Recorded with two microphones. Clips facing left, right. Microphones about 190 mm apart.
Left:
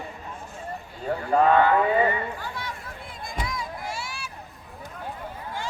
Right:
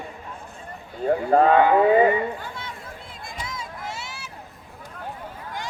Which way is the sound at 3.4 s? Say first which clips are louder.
Left 1 dB; 25° right (ahead or behind).